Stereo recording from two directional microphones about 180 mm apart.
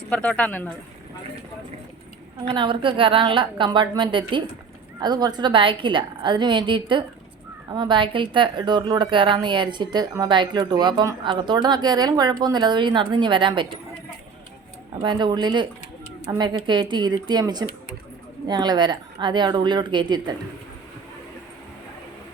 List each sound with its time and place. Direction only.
0.1 s speech: 5° left (ahead or behind)
2.4 s speech: 30° right (ahead or behind)
15.0 s speech: 25° right (ahead or behind)